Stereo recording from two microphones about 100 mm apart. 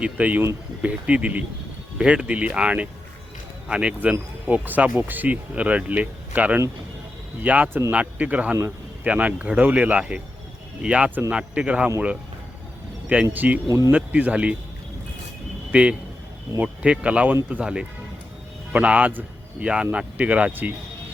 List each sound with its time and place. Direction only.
0.0 s speech: 15° right (ahead or behind)
13.3 s speech: 15° right (ahead or behind)
13.7 s speech: 35° right (ahead or behind)
13.9 s speech: 15° right (ahead or behind)
15.7 s a man's voice: 10° right (ahead or behind)